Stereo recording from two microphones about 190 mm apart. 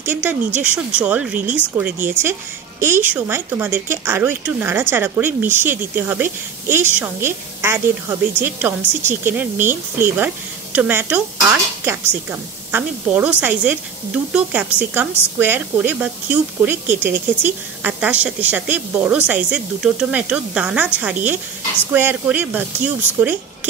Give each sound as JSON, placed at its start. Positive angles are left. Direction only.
{"t": 0.0, "sound": "speech", "side_deg": -10}